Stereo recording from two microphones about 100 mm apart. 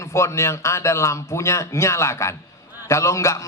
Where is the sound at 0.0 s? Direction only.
30° left (ahead or behind).